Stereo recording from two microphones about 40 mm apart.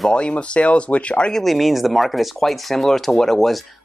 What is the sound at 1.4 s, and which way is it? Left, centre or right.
Speech, centre.